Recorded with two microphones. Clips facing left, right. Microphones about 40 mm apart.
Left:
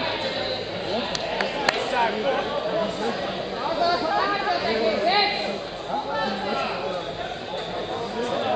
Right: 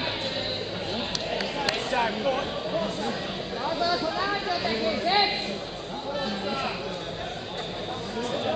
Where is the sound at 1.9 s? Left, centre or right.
Left.